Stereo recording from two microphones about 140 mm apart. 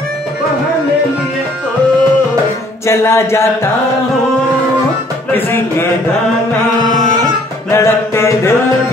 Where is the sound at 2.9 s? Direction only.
20° left (ahead or behind).